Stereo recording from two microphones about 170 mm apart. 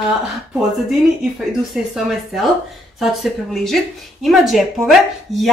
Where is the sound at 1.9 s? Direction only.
Centre (ahead or behind).